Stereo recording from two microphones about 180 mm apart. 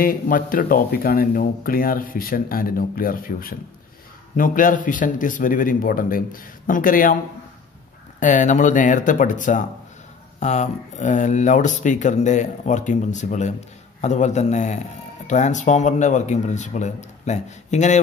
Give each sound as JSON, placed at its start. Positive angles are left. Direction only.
{"t": 0.0, "sound": "speech", "side_deg": 50}
{"t": 8.2, "sound": "speech", "side_deg": 45}